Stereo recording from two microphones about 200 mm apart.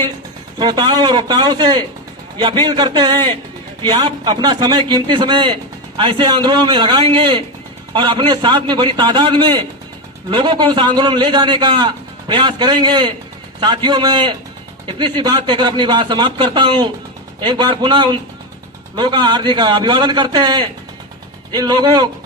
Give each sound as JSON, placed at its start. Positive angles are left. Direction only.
{"t": 0.6, "sound": "a man's voice", "side_deg": -20}